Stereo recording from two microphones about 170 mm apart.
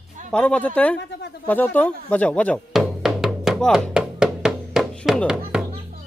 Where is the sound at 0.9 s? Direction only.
80° left.